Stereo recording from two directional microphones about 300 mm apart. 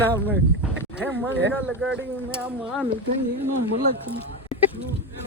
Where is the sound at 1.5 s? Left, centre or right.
Centre.